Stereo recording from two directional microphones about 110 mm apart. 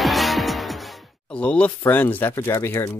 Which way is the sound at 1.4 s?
10° left (ahead or behind).